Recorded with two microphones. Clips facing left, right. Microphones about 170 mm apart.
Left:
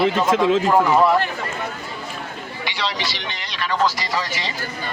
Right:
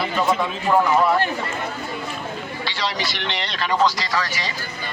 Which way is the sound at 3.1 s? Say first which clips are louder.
Right 3 dB; 65° right (ahead or behind).